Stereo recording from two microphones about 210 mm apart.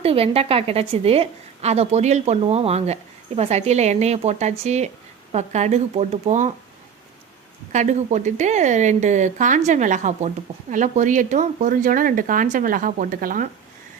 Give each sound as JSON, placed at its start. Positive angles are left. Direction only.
{"t": 0.0, "sound": "a woman's voice", "side_deg": -25}
{"t": 7.7, "sound": "a woman's voice", "side_deg": -35}